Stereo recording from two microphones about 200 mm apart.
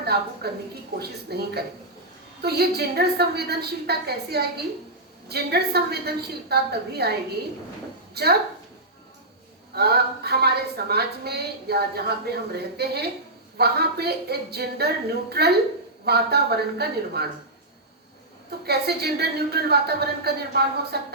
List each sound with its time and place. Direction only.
0.4 s a woman's voice: 55° right (ahead or behind)
9.7 s a woman's voice: 55° right (ahead or behind)
18.6 s a woman's voice: 55° right (ahead or behind)